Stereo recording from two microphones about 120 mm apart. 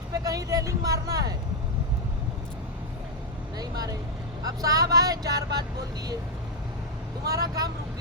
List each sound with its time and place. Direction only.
0.1 s speech: 30° right (ahead or behind)
3.6 s speech: 30° right (ahead or behind)
7.3 s speech: 30° right (ahead or behind)